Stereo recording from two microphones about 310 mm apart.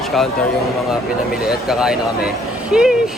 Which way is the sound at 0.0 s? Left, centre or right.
Centre.